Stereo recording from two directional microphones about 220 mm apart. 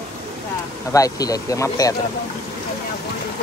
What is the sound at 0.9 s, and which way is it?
Speech, 15° left (ahead or behind).